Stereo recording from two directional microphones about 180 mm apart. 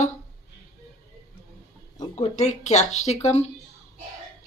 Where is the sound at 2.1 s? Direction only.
40° left (ahead or behind).